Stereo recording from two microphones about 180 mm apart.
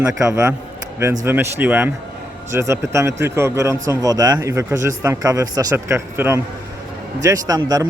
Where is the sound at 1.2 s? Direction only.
15° right (ahead or behind).